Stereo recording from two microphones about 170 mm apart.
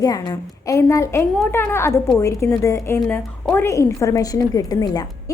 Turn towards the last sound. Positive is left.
turn(degrees=20)  # may be behind; listen again after turning